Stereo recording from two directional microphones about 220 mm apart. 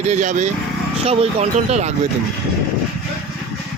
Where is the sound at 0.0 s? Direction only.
30° right (ahead or behind).